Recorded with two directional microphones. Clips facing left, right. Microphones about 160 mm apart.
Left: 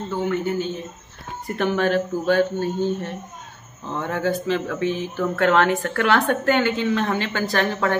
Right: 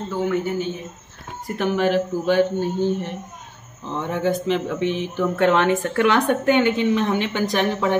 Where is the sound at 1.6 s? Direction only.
10° right (ahead or behind).